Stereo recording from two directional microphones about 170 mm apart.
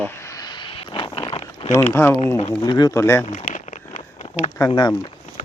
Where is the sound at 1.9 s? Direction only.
15° left (ahead or behind).